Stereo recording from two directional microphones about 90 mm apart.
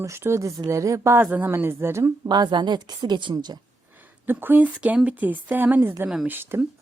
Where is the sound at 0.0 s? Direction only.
30° right (ahead or behind).